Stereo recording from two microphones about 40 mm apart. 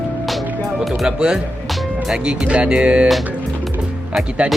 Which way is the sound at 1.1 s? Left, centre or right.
Centre.